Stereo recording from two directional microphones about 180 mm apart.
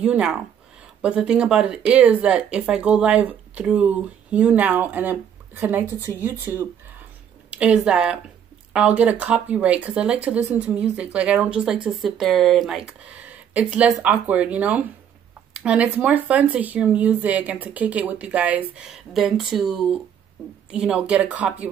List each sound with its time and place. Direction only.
0.0 s speech: 5° right (ahead or behind)